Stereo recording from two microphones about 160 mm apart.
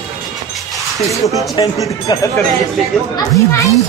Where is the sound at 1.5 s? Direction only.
20° left (ahead or behind).